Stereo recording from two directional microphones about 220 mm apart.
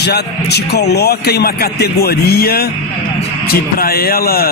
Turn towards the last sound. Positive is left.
turn(degrees=45)  # may be behind; listen again after turning